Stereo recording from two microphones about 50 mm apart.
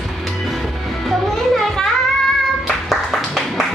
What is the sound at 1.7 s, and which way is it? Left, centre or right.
Child singing, centre.